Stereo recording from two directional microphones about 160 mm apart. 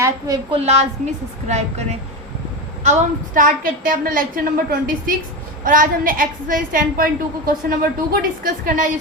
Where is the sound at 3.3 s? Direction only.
60° right (ahead or behind).